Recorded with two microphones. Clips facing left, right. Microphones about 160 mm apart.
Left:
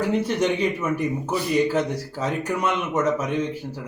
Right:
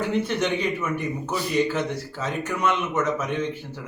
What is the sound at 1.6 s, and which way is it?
A man's voice, 10° left (ahead or behind).